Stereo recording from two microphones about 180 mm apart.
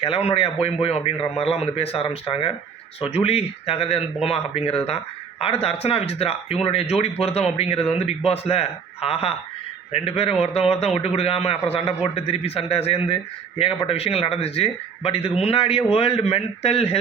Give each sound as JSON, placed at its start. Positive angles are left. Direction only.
{"t": 0.0, "sound": "speech", "side_deg": 30}